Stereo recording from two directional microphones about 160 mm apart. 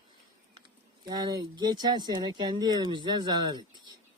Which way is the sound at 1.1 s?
25° right (ahead or behind).